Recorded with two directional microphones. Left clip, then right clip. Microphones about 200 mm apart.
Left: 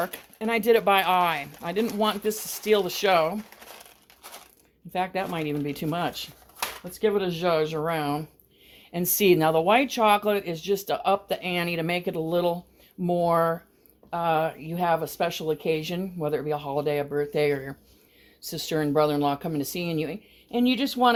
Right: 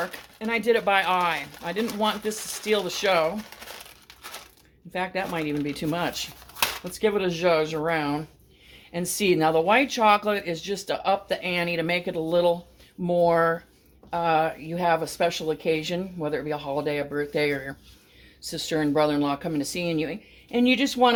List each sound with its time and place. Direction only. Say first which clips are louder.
0.0 s speech: left 1 dB; 45° left (ahead or behind)
4.9 s speech: even; 40° left (ahead or behind)
8.9 s speech: left 2 dB; 45° left (ahead or behind)